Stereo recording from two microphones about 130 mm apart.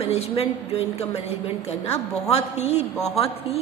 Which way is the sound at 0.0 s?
55° left (ahead or behind).